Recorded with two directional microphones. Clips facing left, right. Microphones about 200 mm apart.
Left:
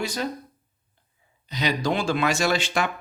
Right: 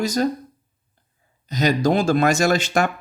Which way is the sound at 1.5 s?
45° right (ahead or behind).